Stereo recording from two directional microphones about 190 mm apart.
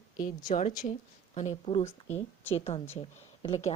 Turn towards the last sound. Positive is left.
turn(degrees=30)  # may be behind; listen again after turning